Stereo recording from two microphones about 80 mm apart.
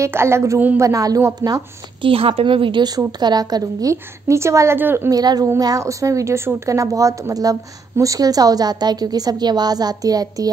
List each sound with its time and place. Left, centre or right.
0.0 s a woman's voice: right
2.0 s a woman's voice: right
3.1 s a woman's voice: right
3.9 s a woman's voice: right
5.1 s a woman's voice: right